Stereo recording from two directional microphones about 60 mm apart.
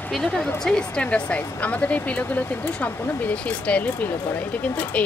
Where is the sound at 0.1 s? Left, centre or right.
Centre.